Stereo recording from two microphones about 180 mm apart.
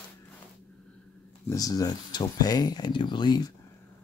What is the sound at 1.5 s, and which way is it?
Speech, 20° left (ahead or behind).